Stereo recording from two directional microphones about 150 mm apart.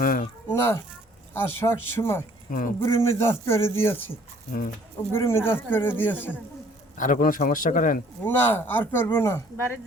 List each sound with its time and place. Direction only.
0.0 s a sound: 65° left (ahead or behind)
0.4 s speech: 15° left (ahead or behind)
2.5 s a man's voice: 65° left (ahead or behind)
2.8 s speech: 15° left (ahead or behind)
5.1 s speech: 15° left (ahead or behind)
6.9 s a man's voice: 60° left (ahead or behind)
8.2 s speech: 15° left (ahead or behind)